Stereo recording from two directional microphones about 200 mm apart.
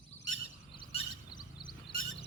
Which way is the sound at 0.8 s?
20° left (ahead or behind).